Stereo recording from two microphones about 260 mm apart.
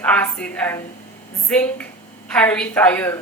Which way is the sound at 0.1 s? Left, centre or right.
Centre.